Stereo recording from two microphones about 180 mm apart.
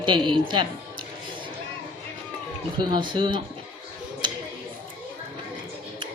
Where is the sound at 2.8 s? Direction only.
25° right (ahead or behind).